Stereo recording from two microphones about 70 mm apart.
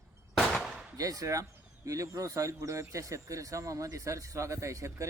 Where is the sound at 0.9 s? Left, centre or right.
Right.